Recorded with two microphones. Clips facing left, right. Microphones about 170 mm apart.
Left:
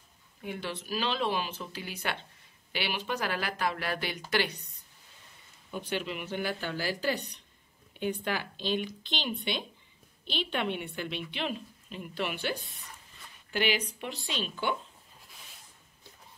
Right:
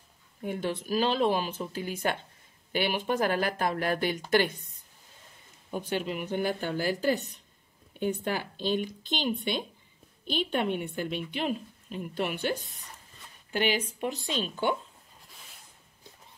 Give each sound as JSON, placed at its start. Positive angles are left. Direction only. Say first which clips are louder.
{"t": 0.4, "sound": "speech", "louder": "right 5 dB", "side_deg": -45}
{"t": 5.7, "sound": "speech", "louder": "right 3 dB", "side_deg": -45}
{"t": 13.5, "sound": "speech", "louder": "right 2 dB", "side_deg": -45}